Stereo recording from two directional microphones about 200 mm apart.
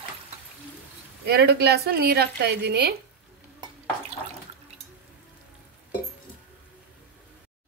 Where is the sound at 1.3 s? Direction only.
55° right (ahead or behind).